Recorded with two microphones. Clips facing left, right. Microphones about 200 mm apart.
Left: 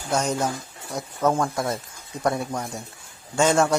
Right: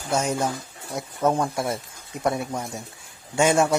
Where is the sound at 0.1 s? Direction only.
5° right (ahead or behind).